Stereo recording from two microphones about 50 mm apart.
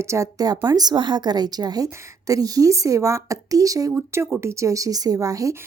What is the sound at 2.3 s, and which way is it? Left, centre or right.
A woman's voice, right.